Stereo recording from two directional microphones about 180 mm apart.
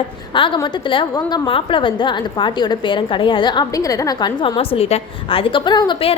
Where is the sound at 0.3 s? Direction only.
25° left (ahead or behind).